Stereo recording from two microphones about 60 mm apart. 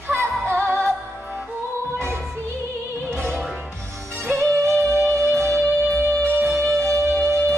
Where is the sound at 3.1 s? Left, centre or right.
Right.